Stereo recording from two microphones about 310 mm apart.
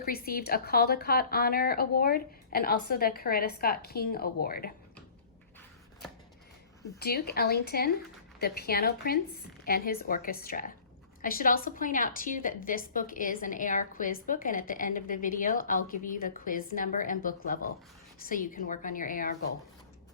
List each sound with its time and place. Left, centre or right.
0.0 s a woman's voice: left
7.0 s a woman's voice: left